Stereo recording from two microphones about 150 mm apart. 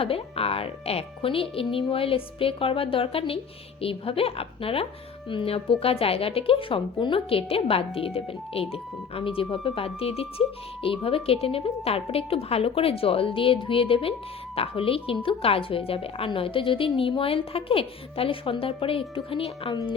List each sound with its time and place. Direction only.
0.0 s a woman's voice: 40° left (ahead or behind)